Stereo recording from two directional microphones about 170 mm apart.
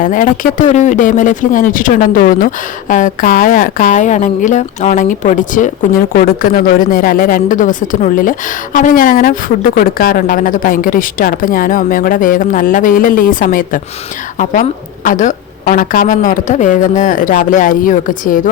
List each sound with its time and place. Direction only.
0.0 s speech: 50° left (ahead or behind)